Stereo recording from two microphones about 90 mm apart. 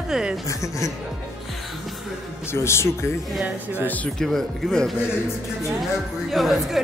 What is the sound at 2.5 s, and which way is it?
Speech, 30° left (ahead or behind).